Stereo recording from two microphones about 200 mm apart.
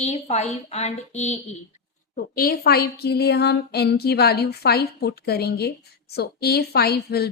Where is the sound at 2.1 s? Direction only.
45° left (ahead or behind).